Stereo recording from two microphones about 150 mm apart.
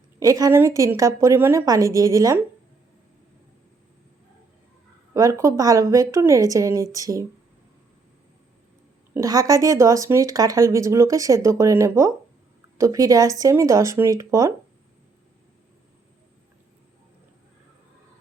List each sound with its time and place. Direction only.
0.2 s speech: 25° right (ahead or behind)
5.1 s speech: 20° right (ahead or behind)
9.1 s speech: 25° right (ahead or behind)